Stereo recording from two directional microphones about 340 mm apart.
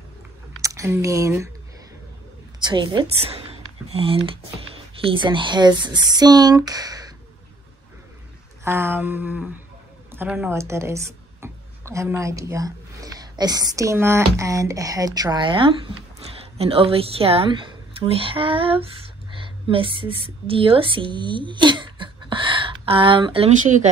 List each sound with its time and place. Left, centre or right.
0.6 s speech: centre
2.6 s speech: centre
8.6 s a sound: centre
10.1 s speech: centre